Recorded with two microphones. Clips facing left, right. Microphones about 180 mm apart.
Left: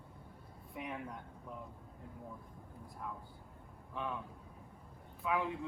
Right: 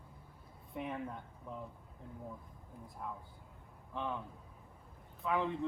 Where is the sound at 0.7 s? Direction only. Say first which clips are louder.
Right 3 dB; centre (ahead or behind).